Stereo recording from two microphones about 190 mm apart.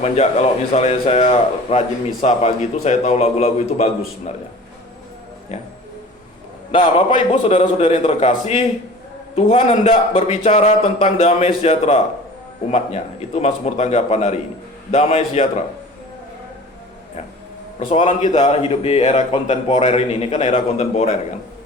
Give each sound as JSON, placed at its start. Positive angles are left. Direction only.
{"t": 0.0, "sound": "a man's voice", "side_deg": 35}
{"t": 6.7, "sound": "a man's voice", "side_deg": 40}
{"t": 17.7, "sound": "a man's voice", "side_deg": 35}